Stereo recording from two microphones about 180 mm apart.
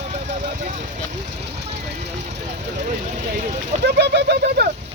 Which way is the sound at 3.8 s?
65° right (ahead or behind).